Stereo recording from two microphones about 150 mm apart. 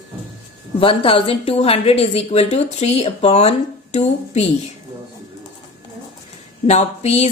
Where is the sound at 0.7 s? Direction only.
35° left (ahead or behind).